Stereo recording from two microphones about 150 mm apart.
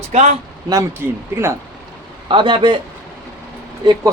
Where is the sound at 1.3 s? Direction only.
15° right (ahead or behind).